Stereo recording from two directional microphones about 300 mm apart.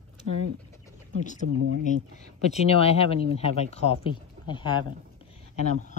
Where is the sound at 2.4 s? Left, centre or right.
Left.